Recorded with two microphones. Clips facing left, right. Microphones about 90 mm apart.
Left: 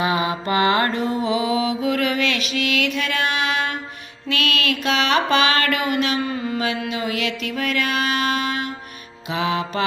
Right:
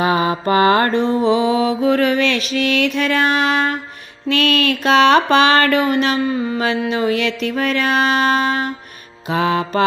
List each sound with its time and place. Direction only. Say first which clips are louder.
0.0 s mantra: right 5 dB; 40° right (ahead or behind)
9.3 s music: right 5 dB; 45° right (ahead or behind)